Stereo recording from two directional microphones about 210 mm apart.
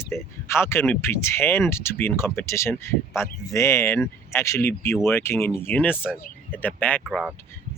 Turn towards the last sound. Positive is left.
turn(degrees=-5)  # may be behind; listen again after turning